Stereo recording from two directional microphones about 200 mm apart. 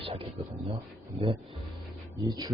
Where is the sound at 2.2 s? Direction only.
20° right (ahead or behind).